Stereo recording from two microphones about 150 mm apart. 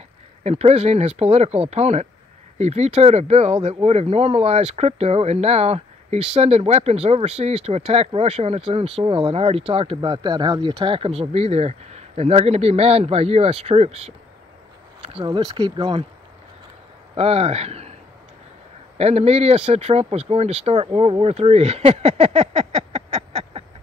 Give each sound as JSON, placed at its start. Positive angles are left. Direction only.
{"t": 0.4, "sound": "speech", "side_deg": -45}
{"t": 15.1, "sound": "speech", "side_deg": -30}
{"t": 17.1, "sound": "speech", "side_deg": -40}
{"t": 18.9, "sound": "speech", "side_deg": -45}